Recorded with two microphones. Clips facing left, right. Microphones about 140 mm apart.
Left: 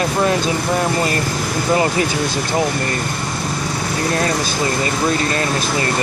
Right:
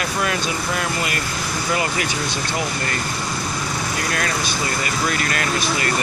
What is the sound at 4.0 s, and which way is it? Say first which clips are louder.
Speech: left 7 dB; 30° left (ahead or behind).